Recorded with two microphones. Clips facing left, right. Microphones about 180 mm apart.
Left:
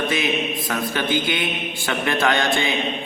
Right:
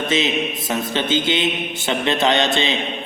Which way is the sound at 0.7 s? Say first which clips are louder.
Right 2 dB; 20° right (ahead or behind).